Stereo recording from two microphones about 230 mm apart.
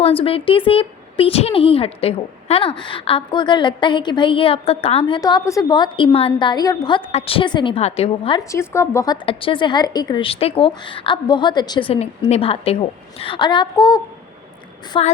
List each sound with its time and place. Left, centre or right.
0.0 s speech: left
8.4 s speech: centre